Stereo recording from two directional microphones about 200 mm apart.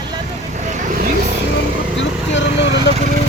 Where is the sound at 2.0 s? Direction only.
60° left (ahead or behind).